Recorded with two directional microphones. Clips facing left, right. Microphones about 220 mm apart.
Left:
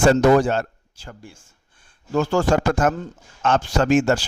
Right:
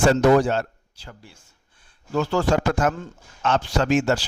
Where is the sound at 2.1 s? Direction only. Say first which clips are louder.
Left 2 dB; 45° left (ahead or behind).